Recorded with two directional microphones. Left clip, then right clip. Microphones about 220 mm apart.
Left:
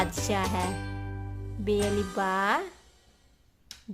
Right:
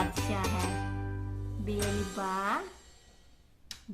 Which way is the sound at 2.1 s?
55° left (ahead or behind).